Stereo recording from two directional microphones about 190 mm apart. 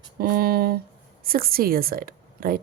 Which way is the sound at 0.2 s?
55° right (ahead or behind).